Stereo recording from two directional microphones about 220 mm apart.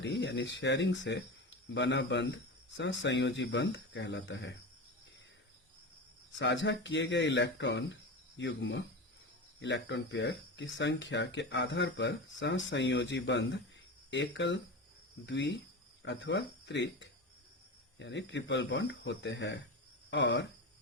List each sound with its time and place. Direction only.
0.0 s speech: 50° left (ahead or behind)
6.3 s speech: 55° left (ahead or behind)
20.1 s cricket: 55° left (ahead or behind)